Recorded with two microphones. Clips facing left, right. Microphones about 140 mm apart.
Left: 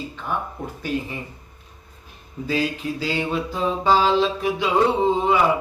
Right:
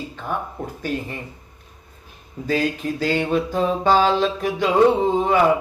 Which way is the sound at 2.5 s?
50° right (ahead or behind).